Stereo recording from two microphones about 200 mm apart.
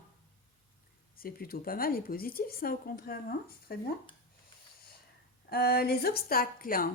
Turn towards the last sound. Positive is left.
turn(degrees=45)  # may be behind; listen again after turning